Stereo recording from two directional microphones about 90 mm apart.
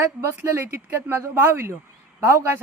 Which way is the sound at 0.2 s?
30° right (ahead or behind).